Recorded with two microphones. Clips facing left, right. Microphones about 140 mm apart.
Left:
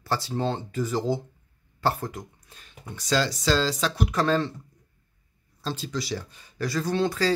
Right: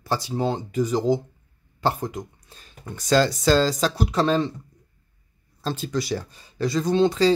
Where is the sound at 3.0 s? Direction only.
50° right (ahead or behind); by 4.5 s 15° right (ahead or behind).